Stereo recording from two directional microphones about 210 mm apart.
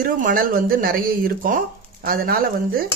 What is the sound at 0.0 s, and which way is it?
Speech, 40° right (ahead or behind).